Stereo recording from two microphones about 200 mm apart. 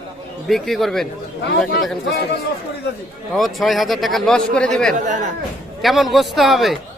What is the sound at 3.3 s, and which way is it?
Speech, centre (ahead or behind).